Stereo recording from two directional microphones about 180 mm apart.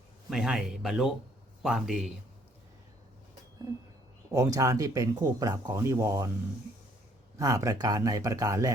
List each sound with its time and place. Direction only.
0.3 s speech: 5° right (ahead or behind)
4.3 s speech: 20° right (ahead or behind)
7.3 s speech: 20° right (ahead or behind)